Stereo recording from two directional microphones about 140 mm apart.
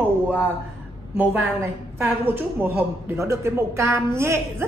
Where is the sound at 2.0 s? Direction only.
15° right (ahead or behind).